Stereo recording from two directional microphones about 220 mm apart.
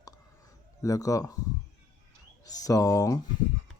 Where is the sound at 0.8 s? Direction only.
15° left (ahead or behind).